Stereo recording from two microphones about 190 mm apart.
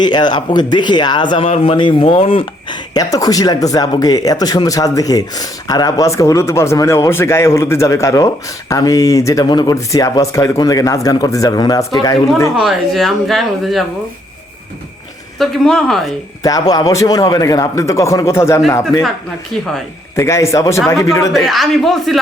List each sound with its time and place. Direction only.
0.0 s speech: 25° left (ahead or behind)
12.5 s speech: centre (ahead or behind)
15.4 s speech: centre (ahead or behind)
16.4 s speech: 20° left (ahead or behind)
20.1 s speech: 15° left (ahead or behind)
21.3 s speech: centre (ahead or behind)